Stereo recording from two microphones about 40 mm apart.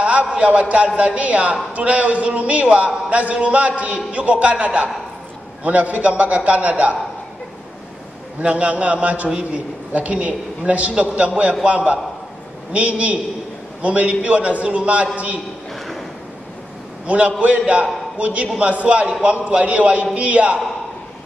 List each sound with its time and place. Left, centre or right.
0.0 s a man's voice: right
8.4 s a man's voice: right
17.0 s a man's voice: right